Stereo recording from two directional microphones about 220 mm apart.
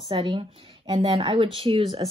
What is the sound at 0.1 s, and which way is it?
Speech, 20° right (ahead or behind).